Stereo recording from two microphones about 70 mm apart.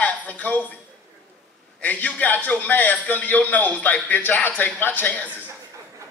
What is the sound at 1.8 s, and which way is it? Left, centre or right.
Speech, left.